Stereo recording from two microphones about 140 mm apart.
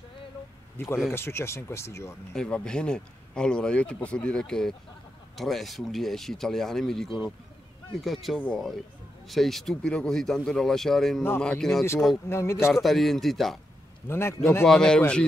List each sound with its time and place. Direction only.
0.7 s a man's voice: 15° left (ahead or behind)
2.3 s speech: 5° left (ahead or behind)
12.3 s speech: 20° left (ahead or behind)
12.7 s speech: centre (ahead or behind)
14.0 s a man's voice: 20° left (ahead or behind)
14.7 s a man's voice: 5° left (ahead or behind)